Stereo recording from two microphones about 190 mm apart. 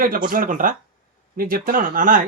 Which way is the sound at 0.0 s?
50° right (ahead or behind).